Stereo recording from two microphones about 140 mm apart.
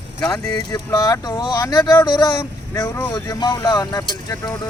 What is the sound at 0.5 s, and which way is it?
Speech, 25° left (ahead or behind).